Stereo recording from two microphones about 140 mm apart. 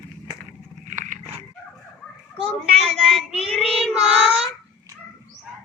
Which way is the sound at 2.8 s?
Centre (ahead or behind).